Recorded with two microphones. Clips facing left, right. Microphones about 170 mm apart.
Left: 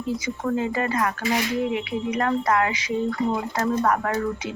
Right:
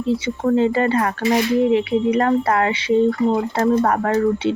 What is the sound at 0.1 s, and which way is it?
Speech, 30° right (ahead or behind).